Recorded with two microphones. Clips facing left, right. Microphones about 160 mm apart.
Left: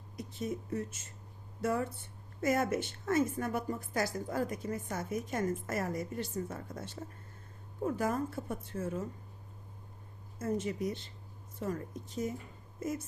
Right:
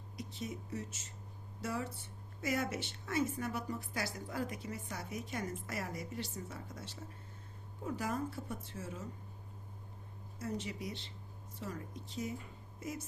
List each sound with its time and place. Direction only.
0.2 s a woman's voice: 50° left (ahead or behind)
10.3 s a woman's voice: 50° left (ahead or behind)